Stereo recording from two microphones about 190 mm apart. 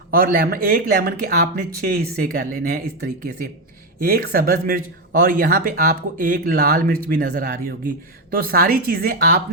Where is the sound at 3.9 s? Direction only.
50° right (ahead or behind).